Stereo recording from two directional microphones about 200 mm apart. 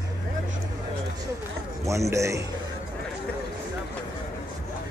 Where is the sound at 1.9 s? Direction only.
15° right (ahead or behind).